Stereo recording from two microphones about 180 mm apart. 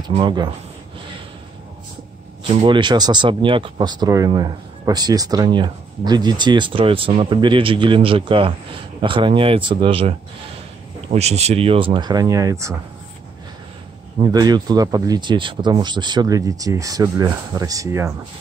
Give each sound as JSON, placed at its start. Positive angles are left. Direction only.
{"t": 0.0, "sound": "speech", "side_deg": -25}
{"t": 2.6, "sound": "speech", "side_deg": -25}
{"t": 14.2, "sound": "speech", "side_deg": -20}